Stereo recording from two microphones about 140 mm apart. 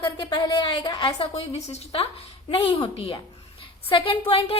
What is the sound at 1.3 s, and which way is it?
A woman's voice, 50° left (ahead or behind).